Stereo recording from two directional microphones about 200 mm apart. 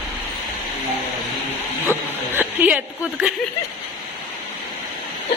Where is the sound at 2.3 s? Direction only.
10° right (ahead or behind).